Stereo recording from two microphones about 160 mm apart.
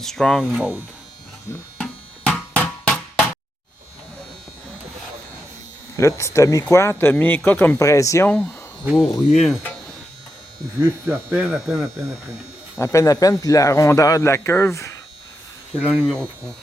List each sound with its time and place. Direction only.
0.0 s speech: 5° left (ahead or behind)
1.8 s music: 5° left (ahead or behind)
6.0 s speech: 20° left (ahead or behind)
8.8 s speech: 5° right (ahead or behind)
11.0 s speech: 15° right (ahead or behind)
12.8 s speech: 20° left (ahead or behind)
15.9 s speech: 5° right (ahead or behind)